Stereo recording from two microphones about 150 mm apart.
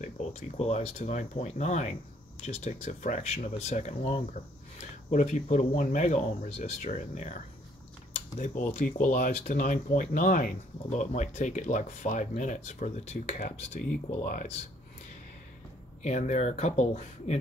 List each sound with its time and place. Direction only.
0.0 s speech: 50° left (ahead or behind)
8.7 s speech: 60° left (ahead or behind)
16.0 s speech: 50° left (ahead or behind)